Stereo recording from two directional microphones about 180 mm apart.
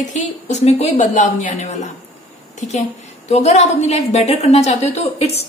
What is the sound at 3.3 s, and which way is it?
A woman's voice, 35° left (ahead or behind).